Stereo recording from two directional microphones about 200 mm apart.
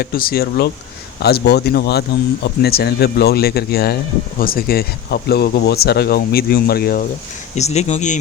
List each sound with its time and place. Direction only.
0.0 s speech: 45° left (ahead or behind)
7.5 s speech: 35° left (ahead or behind)